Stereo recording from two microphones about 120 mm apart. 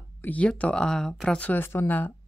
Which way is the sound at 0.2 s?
10° left (ahead or behind).